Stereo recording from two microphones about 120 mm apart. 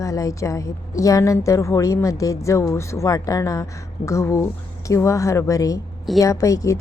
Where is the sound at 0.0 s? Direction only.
25° left (ahead or behind).